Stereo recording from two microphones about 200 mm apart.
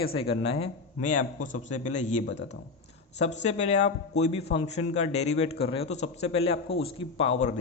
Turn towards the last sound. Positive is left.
turn(degrees=30)  # may be behind; listen again after turning